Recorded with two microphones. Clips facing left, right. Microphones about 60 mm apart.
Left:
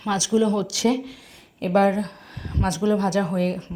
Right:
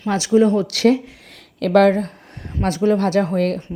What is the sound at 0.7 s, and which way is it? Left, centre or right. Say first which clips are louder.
Speech: right 6 dB; right.